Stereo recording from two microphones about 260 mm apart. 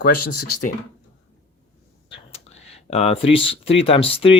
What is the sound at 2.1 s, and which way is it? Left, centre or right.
Speech, left.